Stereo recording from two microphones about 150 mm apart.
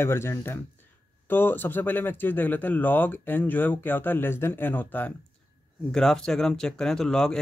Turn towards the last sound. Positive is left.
turn(degrees=5)  # may be behind; listen again after turning